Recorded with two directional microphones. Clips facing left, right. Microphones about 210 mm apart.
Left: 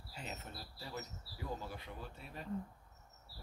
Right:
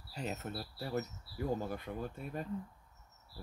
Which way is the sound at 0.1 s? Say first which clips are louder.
Right 8 dB; 45° right (ahead or behind).